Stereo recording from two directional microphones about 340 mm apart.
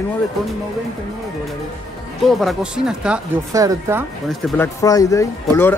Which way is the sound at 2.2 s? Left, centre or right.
Centre.